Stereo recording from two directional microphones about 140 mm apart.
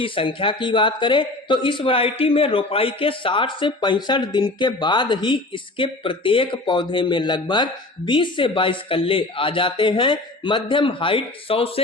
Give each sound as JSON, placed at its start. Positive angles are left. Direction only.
{"t": 0.0, "sound": "a man's voice", "side_deg": 40}